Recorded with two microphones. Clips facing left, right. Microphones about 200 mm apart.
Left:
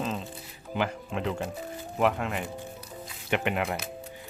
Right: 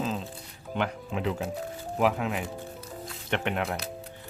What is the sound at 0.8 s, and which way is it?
Speech, centre (ahead or behind).